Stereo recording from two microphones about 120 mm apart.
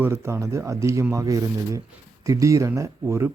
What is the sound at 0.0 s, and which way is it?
Speech, 20° right (ahead or behind).